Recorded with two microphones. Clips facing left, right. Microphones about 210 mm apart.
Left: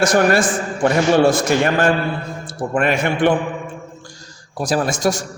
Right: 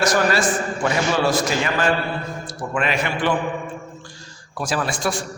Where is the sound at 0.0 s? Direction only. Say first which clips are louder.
Left 4 dB; 50° left (ahead or behind).